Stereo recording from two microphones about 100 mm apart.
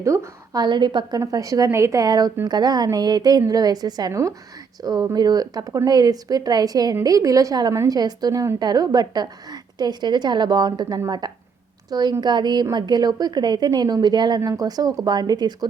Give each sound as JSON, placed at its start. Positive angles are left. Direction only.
{"t": 0.0, "sound": "a woman's voice", "side_deg": -30}
{"t": 0.6, "sound": "a woman's voice", "side_deg": -50}
{"t": 1.2, "sound": "a woman's voice", "side_deg": -35}